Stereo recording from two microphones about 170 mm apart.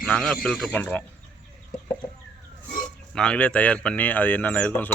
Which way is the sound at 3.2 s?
5° left (ahead or behind).